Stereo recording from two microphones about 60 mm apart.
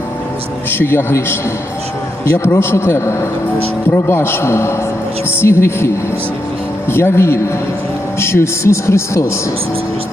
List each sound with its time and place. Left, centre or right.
0.7 s a man's voice: left
3.8 s a man's voice: left
6.9 s a man's voice: left